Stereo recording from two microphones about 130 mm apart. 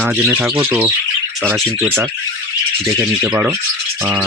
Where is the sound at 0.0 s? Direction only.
15° right (ahead or behind).